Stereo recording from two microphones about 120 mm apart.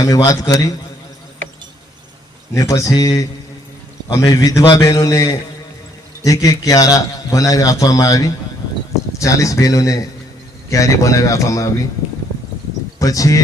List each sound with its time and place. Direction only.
0.0 s a man's voice: 30° left (ahead or behind)
2.6 s a man's voice: 30° left (ahead or behind)
13.0 s a man's voice: 30° left (ahead or behind)